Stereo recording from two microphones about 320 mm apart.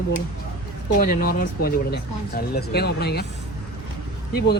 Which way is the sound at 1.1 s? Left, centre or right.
Left.